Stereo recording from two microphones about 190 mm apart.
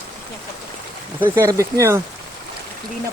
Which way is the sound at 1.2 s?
15° right (ahead or behind).